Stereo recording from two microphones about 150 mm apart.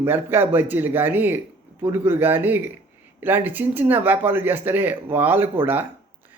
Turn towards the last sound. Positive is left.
turn(degrees=-15)  # may be behind; listen again after turning